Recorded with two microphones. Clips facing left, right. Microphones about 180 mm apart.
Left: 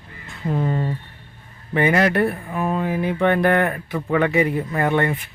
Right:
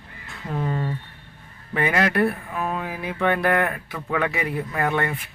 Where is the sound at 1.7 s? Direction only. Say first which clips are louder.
Left 4 dB; centre (ahead or behind).